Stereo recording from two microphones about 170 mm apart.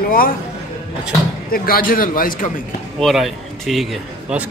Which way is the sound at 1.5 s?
60° left (ahead or behind).